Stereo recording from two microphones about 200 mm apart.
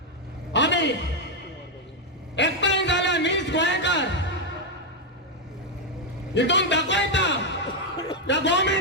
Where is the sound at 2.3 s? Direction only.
65° left (ahead or behind).